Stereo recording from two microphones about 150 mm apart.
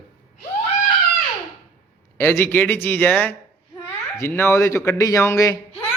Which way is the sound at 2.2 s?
15° left (ahead or behind).